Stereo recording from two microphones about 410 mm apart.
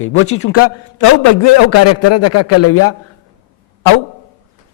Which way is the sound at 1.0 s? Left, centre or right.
Left.